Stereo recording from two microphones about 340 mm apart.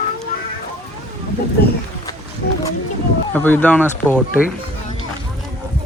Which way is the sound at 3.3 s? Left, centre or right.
Centre.